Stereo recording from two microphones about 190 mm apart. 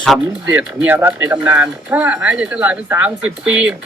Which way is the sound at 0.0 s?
5° right (ahead or behind).